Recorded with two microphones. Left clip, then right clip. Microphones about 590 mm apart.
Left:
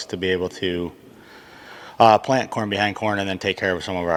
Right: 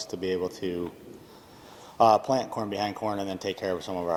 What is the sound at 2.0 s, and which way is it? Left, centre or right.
Speech, left.